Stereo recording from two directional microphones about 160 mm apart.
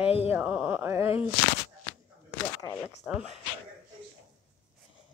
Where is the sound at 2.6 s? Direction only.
15° left (ahead or behind).